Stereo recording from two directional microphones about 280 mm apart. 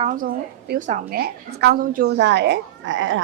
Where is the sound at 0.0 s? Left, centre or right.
Right.